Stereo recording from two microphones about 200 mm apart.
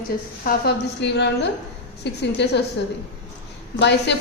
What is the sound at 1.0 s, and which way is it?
A woman's voice, 60° left (ahead or behind).